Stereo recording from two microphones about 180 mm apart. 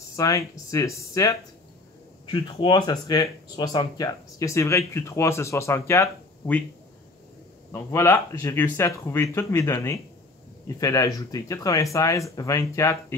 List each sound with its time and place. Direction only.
0.1 s speech: 20° left (ahead or behind)
2.3 s speech: 25° left (ahead or behind)
7.7 s speech: 15° left (ahead or behind)